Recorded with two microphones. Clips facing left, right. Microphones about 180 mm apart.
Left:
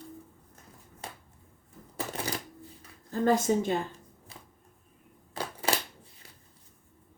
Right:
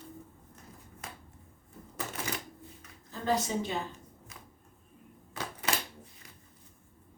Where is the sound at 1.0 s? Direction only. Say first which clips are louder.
Left 3 dB; 30° left (ahead or behind).